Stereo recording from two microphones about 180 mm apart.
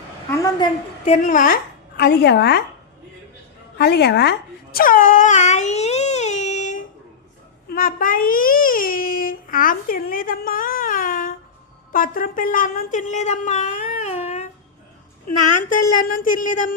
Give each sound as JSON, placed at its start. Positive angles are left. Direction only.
{"t": 0.3, "sound": "a woman's voice", "side_deg": 20}
{"t": 1.0, "sound": "a woman's voice", "side_deg": 40}
{"t": 2.0, "sound": "a woman's voice", "side_deg": 70}
{"t": 3.8, "sound": "speech", "side_deg": 65}
{"t": 7.7, "sound": "a sound", "side_deg": 50}
{"t": 11.9, "sound": "speech", "side_deg": 50}
{"t": 15.3, "sound": "a woman's voice", "side_deg": 50}